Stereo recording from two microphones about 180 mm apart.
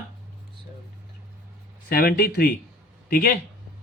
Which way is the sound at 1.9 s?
55° left (ahead or behind).